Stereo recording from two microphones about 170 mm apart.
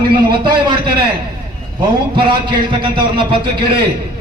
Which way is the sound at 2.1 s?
30° right (ahead or behind).